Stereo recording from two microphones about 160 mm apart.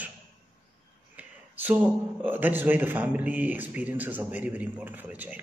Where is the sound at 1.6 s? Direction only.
10° right (ahead or behind).